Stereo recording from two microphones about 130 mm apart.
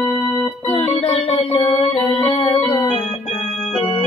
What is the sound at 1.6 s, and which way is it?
Music, 50° left (ahead or behind).